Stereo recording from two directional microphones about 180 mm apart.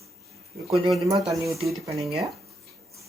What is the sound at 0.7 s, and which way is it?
Speech, centre (ahead or behind).